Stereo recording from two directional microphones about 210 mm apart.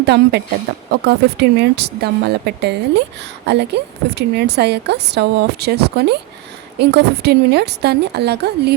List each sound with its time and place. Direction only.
0.0 s a woman's voice: 50° right (ahead or behind)